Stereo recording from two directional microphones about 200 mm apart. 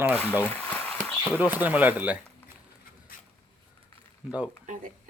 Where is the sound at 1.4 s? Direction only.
10° right (ahead or behind).